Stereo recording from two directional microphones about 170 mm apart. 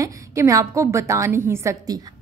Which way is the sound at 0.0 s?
20° right (ahead or behind).